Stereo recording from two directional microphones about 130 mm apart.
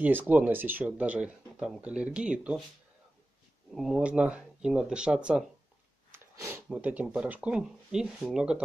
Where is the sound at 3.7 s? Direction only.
Centre (ahead or behind).